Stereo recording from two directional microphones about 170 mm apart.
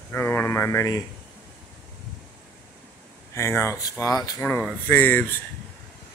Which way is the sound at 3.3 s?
15° left (ahead or behind).